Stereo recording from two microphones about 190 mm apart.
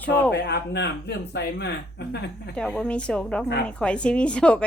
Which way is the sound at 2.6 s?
5° left (ahead or behind).